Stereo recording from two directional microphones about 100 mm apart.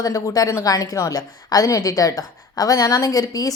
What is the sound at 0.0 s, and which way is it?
A woman's voice, 35° left (ahead or behind).